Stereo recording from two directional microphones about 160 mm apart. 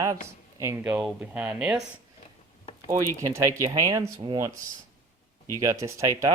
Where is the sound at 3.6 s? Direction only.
20° right (ahead or behind).